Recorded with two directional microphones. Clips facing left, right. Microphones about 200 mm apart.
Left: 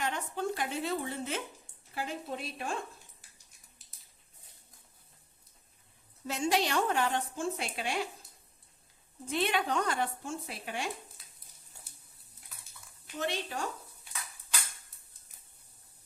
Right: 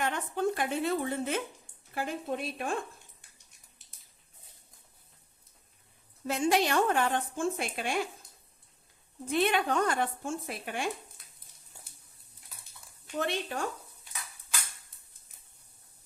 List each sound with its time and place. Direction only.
0.0 s a woman's voice: 55° right (ahead or behind)
6.2 s a woman's voice: 55° right (ahead or behind)
9.2 s a woman's voice: 55° right (ahead or behind)
13.1 s speech: 55° right (ahead or behind)